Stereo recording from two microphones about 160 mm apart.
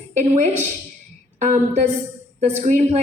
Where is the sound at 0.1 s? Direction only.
50° right (ahead or behind).